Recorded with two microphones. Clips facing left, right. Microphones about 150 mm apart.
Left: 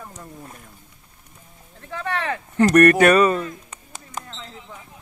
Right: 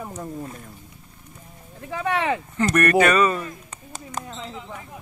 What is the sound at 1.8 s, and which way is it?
Speech, 10° right (ahead or behind).